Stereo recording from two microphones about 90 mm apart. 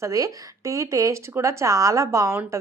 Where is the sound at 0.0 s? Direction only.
40° right (ahead or behind).